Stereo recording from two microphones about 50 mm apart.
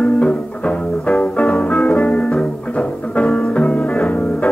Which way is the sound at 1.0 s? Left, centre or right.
Left.